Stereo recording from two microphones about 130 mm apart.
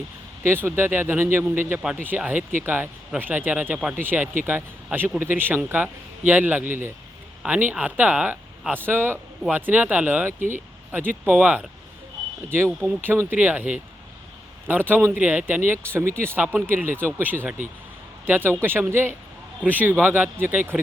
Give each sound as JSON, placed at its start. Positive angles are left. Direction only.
{"t": 0.4, "sound": "speech", "side_deg": -15}
{"t": 12.8, "sound": "speech", "side_deg": -15}